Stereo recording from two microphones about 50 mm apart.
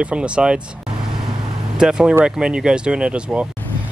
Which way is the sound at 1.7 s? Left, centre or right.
Centre.